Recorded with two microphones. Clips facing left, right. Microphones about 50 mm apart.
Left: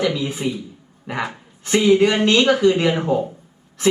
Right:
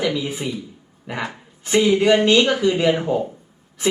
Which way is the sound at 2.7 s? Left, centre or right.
Centre.